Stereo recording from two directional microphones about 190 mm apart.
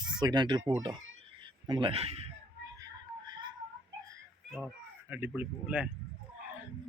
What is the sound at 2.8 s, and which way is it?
Music, 20° right (ahead or behind).